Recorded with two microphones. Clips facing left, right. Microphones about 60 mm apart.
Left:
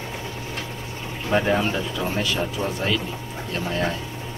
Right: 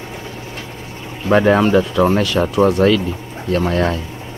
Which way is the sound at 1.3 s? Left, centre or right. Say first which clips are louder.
Right 8 dB; right.